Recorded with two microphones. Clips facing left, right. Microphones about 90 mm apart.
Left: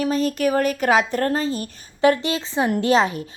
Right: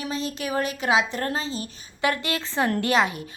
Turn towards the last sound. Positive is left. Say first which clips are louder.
# left 4 dB
turn(degrees=30)  # may be behind; listen again after turning